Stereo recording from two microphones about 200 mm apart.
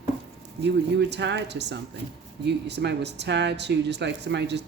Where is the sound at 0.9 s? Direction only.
60° right (ahead or behind).